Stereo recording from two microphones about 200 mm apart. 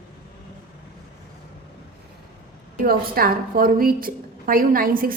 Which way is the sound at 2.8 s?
45° right (ahead or behind).